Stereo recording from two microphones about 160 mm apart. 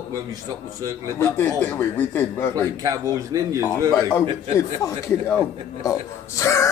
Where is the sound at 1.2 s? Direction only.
15° left (ahead or behind).